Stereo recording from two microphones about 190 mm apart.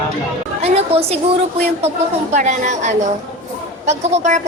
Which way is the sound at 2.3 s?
40° right (ahead or behind).